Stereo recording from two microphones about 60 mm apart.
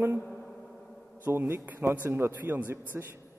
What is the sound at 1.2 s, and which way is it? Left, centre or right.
A man's voice, right.